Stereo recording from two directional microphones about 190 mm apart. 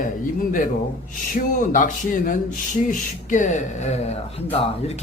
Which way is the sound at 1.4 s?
45° left (ahead or behind).